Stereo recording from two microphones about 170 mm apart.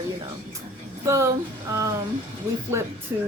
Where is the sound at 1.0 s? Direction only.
15° right (ahead or behind).